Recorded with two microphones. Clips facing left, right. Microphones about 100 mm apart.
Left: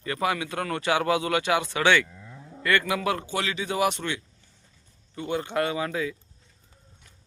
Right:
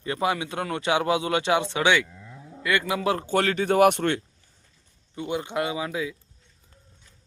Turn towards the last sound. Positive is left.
turn(degrees=-5)  # may be behind; listen again after turning